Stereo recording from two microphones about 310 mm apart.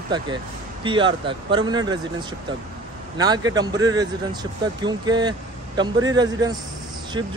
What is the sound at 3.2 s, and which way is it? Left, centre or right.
Speech, centre.